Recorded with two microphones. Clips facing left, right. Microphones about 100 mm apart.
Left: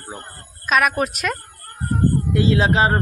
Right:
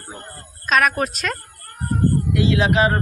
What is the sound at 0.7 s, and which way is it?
Speech, 10° left (ahead or behind).